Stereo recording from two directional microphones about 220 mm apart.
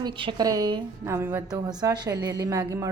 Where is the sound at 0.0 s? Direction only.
20° right (ahead or behind).